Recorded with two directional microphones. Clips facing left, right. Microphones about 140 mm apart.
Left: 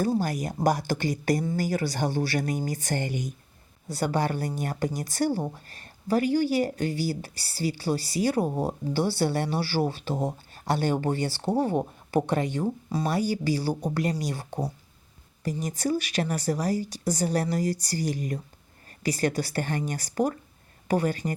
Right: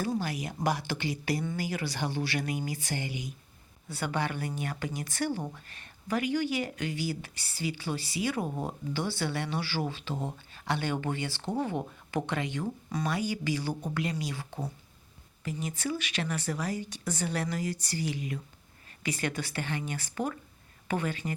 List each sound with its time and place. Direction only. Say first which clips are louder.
0.0 s speech: left 6 dB; 40° left (ahead or behind)